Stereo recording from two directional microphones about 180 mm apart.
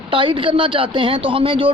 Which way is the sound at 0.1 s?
30° right (ahead or behind).